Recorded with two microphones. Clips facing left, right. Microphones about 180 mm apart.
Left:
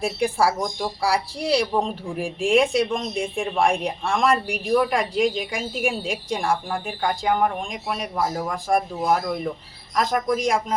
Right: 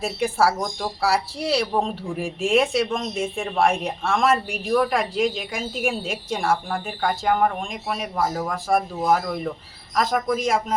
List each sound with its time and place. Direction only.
0.0 s speech: centre (ahead or behind)